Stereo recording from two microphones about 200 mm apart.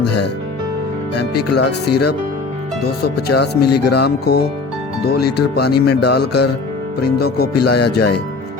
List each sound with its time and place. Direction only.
1.1 s speech: 55° left (ahead or behind)
3.0 s speech: 55° left (ahead or behind)